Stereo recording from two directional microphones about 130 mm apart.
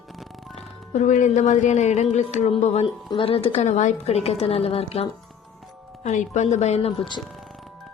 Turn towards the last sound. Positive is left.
turn(degrees=45)  # may be behind; listen again after turning